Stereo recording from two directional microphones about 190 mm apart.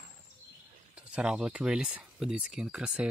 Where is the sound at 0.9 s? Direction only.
5° right (ahead or behind).